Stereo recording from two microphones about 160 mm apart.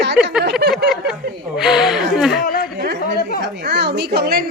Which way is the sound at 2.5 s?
70° left (ahead or behind).